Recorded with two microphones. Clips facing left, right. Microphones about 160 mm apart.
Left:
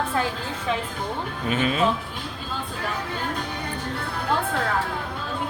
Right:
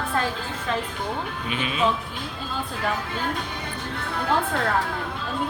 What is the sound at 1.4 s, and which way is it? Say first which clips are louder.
Speech: left 8 dB; 40° left (ahead or behind).